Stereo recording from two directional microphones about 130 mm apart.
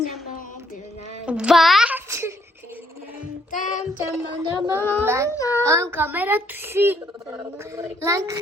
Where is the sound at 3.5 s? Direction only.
80° left.